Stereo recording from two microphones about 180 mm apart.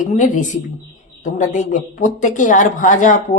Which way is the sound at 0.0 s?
45° left (ahead or behind).